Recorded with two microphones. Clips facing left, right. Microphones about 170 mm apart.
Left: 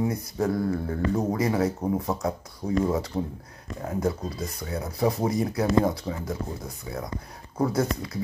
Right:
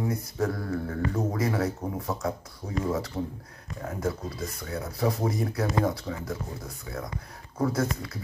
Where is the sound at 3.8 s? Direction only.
20° left (ahead or behind).